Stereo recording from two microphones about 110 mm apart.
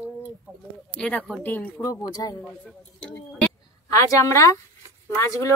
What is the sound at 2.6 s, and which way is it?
Speech, 10° left (ahead or behind).